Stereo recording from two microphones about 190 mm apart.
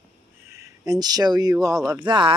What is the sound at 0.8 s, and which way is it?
Speech, 20° right (ahead or behind).